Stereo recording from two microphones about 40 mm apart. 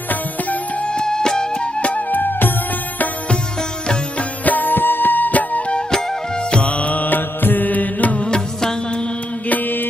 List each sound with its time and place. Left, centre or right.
0.1 s music: left
0.9 s music: centre
2.0 s music: left
4.2 s music: left
6.5 s music: left
9.5 s mantra: left